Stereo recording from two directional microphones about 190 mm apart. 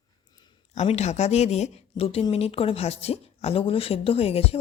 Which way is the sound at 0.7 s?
35° left (ahead or behind).